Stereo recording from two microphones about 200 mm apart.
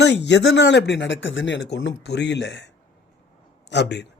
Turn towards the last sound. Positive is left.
turn(degrees=60)  # may be behind; listen again after turning